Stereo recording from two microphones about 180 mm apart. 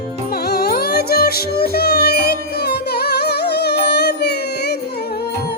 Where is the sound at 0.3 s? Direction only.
60° left (ahead or behind).